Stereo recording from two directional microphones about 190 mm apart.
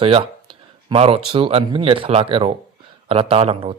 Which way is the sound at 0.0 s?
30° right (ahead or behind).